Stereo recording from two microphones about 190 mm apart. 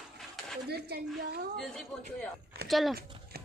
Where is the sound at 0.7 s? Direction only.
55° right (ahead or behind).